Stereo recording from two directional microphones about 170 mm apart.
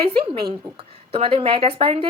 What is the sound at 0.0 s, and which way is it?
A woman's voice, 30° right (ahead or behind).